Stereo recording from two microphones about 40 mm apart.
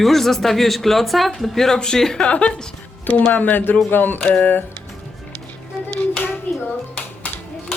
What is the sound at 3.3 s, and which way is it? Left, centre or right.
Speech, left.